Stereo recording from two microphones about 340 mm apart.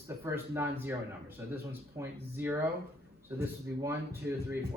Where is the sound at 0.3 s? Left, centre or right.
Centre.